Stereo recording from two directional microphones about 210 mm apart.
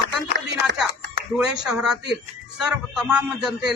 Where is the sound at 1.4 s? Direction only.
5° right (ahead or behind).